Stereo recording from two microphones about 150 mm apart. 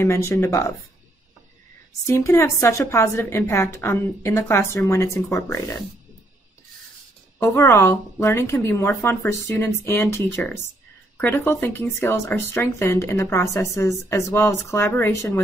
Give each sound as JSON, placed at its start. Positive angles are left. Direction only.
{"t": 0.0, "sound": "speech", "side_deg": 20}
{"t": 2.0, "sound": "a woman's voice", "side_deg": 20}
{"t": 7.3, "sound": "speech", "side_deg": 20}